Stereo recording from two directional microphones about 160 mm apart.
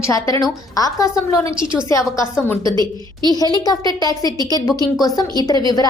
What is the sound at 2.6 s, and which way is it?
Speech, 30° right (ahead or behind).